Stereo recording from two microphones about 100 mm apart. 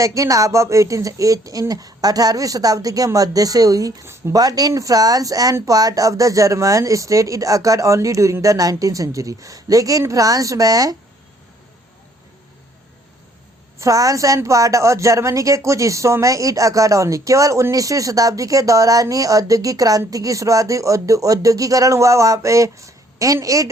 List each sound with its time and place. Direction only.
0.0 s a woman's voice: 35° right (ahead or behind)
13.7 s a woman's voice: 35° right (ahead or behind)